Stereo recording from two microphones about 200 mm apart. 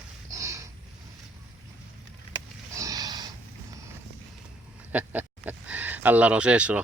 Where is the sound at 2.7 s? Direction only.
15° right (ahead or behind).